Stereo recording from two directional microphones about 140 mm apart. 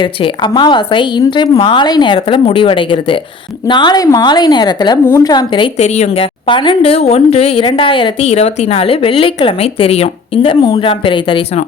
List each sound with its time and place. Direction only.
0.0 s a woman's voice: 35° left (ahead or behind)
5.7 s a woman's voice: 50° left (ahead or behind)
6.5 s speech: 35° left (ahead or behind)
8.3 s speech: 50° left (ahead or behind)